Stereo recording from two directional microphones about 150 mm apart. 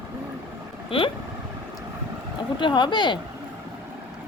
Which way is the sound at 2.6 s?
30° left (ahead or behind).